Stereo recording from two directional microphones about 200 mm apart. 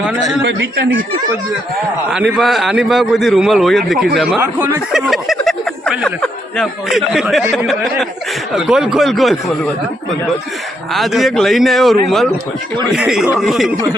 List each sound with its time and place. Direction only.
0.4 s speech: 60° right (ahead or behind)
2.1 s a man's voice: 5° right (ahead or behind)
10.9 s a man's voice: centre (ahead or behind)